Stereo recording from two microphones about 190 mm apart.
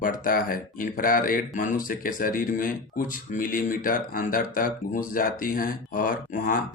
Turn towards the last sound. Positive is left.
turn(degrees=45)  # may be behind; listen again after turning